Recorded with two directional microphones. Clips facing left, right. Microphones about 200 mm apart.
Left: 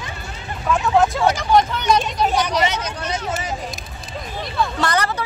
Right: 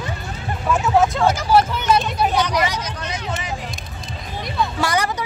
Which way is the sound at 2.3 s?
10° left (ahead or behind).